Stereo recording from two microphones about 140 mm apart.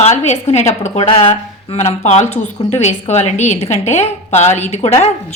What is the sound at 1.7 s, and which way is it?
A woman's voice, 50° left (ahead or behind).